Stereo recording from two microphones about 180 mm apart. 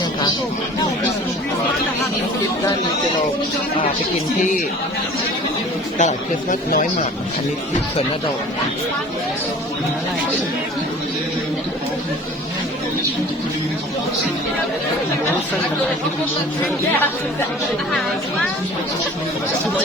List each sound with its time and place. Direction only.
6.0 s speech: 45° left (ahead or behind)